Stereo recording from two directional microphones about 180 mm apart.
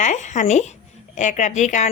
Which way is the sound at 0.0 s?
40° left (ahead or behind).